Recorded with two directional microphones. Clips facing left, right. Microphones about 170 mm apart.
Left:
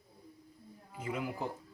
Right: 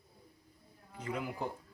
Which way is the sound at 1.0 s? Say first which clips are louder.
Left 1 dB; 5° left (ahead or behind).